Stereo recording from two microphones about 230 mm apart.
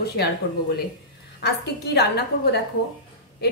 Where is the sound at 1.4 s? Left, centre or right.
Left.